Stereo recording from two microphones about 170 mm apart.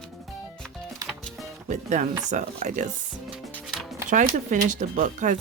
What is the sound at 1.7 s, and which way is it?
Speech, 45° right (ahead or behind).